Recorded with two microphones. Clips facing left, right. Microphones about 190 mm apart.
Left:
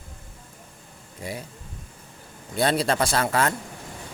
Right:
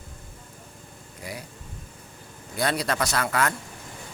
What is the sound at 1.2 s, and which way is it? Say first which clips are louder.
Speech: left 4 dB; 25° left (ahead or behind).